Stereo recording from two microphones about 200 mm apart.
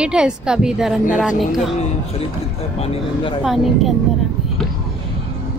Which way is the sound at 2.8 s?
25° left (ahead or behind).